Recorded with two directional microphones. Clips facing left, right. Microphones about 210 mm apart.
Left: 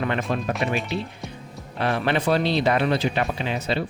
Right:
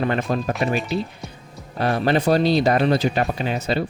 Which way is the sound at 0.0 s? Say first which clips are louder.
Right 3 dB; 35° right (ahead or behind).